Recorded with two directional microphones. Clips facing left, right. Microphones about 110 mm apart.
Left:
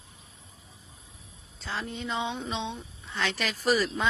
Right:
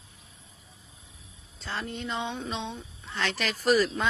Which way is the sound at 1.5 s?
Centre (ahead or behind).